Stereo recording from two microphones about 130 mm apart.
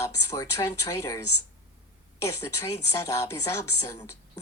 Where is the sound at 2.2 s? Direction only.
20° left (ahead or behind).